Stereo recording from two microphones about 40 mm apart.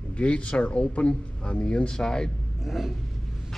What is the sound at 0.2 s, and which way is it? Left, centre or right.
Speech, left.